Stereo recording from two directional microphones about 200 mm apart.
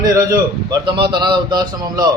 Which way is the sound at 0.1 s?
20° right (ahead or behind).